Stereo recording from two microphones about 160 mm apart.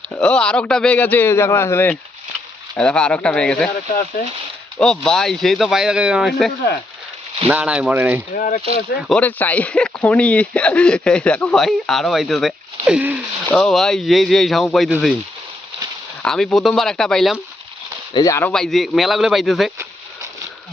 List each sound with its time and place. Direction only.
0.1 s a man's voice: 5° left (ahead or behind)
4.8 s speech: 5° left (ahead or behind); by 8.2 s 10° right (ahead or behind)
8.4 s speech: 60° left (ahead or behind)
9.0 s speech: 5° left (ahead or behind)
13.5 s speech: 5° left (ahead or behind)
16.2 s speech: 5° left (ahead or behind)
18.1 s speech: 20° left (ahead or behind)
18.5 s speech: centre (ahead or behind)